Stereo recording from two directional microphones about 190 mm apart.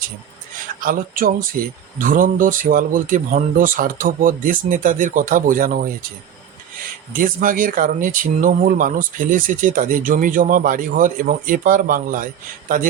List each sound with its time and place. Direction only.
0.8 s speech: 45° right (ahead or behind)
7.1 s speech: 45° right (ahead or behind)